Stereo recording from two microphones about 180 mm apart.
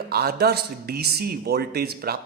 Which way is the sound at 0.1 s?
60° right (ahead or behind).